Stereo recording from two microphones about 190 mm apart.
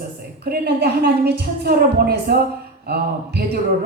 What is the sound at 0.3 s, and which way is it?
A woman's voice, 55° right (ahead or behind).